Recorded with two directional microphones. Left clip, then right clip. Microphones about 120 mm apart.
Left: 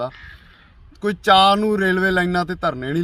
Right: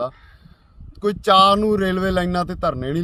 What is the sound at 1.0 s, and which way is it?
Speech, 60° right (ahead or behind).